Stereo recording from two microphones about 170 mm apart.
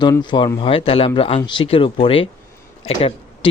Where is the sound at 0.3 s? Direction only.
25° left (ahead or behind).